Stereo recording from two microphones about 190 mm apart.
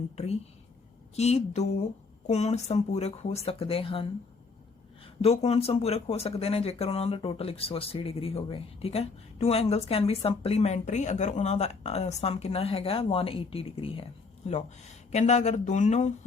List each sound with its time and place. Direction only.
1.1 s speech: 35° left (ahead or behind)
5.0 s speech: 35° left (ahead or behind)